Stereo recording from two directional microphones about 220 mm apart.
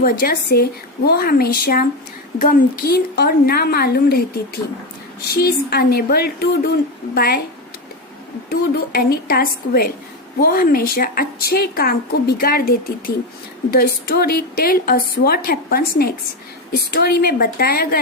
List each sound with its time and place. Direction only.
0.0 s a woman's voice: 40° left (ahead or behind)
5.3 s a woman's voice: 45° left (ahead or behind)
8.4 s a woman's voice: 45° left (ahead or behind)